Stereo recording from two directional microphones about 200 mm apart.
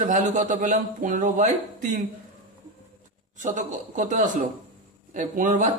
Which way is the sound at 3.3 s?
40° right (ahead or behind).